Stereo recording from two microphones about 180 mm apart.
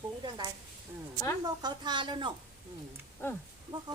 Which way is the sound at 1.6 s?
25° right (ahead or behind).